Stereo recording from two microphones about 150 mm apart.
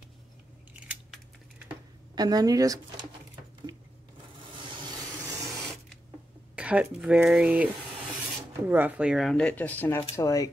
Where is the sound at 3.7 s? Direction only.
20° right (ahead or behind).